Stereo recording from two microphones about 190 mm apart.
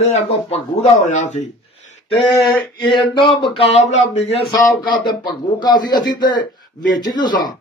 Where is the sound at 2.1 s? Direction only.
25° left (ahead or behind).